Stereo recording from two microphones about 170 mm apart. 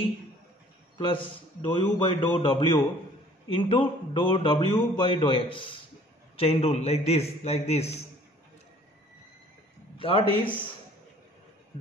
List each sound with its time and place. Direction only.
0.9 s a man's voice: 30° left (ahead or behind)
9.9 s a man's voice: 30° left (ahead or behind)